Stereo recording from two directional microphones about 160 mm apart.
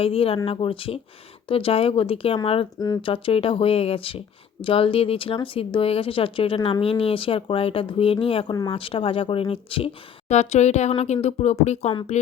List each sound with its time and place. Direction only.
0.0 s speech: 35° left (ahead or behind)
2.7 s speech: 25° left (ahead or behind); by 11.9 s 45° left (ahead or behind)